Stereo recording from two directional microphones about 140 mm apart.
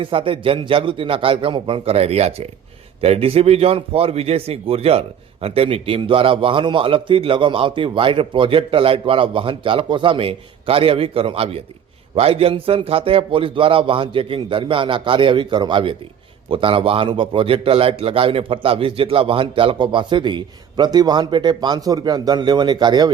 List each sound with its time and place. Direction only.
0.0 s a man's voice: 40° right (ahead or behind)